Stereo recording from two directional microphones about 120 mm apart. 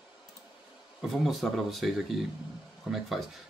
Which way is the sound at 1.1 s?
Centre (ahead or behind).